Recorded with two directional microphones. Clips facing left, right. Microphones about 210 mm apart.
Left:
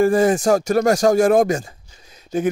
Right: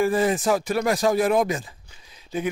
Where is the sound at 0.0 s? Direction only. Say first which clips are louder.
Left 6 dB; 45° left (ahead or behind).